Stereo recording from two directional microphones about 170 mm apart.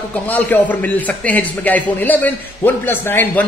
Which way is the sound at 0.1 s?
10° left (ahead or behind).